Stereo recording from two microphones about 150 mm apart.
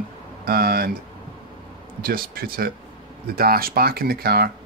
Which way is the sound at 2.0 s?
75° right (ahead or behind).